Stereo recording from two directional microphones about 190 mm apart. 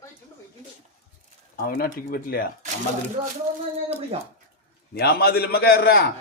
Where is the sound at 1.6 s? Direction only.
50° left (ahead or behind).